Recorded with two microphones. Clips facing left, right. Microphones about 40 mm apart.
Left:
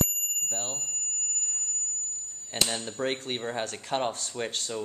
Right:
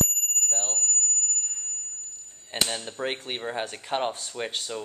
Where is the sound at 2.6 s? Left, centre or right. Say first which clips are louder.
Even; centre.